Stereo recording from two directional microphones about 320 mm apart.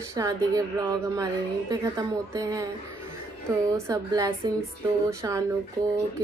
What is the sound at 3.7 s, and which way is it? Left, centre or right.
A woman's voice, centre.